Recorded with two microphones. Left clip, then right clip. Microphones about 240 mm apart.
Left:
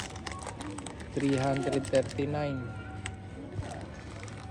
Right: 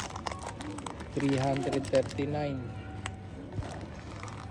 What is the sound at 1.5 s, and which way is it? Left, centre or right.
Speech, centre.